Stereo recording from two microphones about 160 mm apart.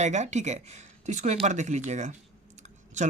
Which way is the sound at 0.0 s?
45° right (ahead or behind).